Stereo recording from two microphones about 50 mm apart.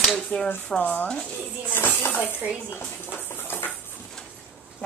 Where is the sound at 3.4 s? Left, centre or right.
Left.